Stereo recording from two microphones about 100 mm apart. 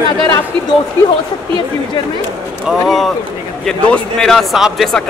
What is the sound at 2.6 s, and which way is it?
A man's voice, centre (ahead or behind).